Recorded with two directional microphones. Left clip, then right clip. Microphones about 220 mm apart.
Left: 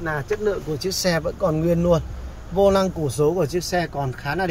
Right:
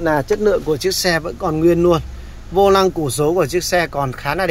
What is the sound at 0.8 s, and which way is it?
Speech, 5° left (ahead or behind).